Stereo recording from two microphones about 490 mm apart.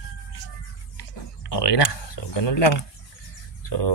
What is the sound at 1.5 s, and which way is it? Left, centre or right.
A man's voice, left.